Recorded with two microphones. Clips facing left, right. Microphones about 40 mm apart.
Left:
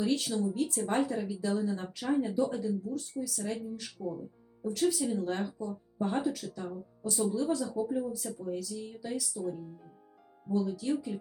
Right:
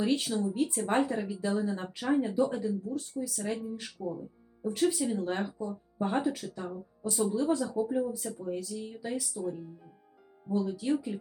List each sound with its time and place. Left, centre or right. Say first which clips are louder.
0.0 s speech: right 1 dB; right
0.3 s speech: right 1 dB; centre
7.6 s speech: right 2 dB; centre
10.6 s speech: right 2 dB; centre